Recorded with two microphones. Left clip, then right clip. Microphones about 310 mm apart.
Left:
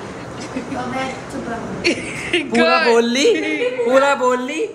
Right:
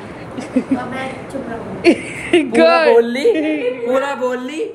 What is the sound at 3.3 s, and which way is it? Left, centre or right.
Speech, centre.